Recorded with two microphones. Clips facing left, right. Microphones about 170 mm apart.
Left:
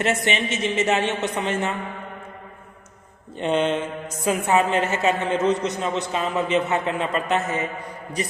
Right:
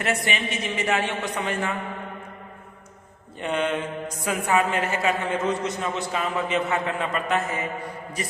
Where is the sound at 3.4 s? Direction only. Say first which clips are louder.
Left 4 dB; 25° left (ahead or behind).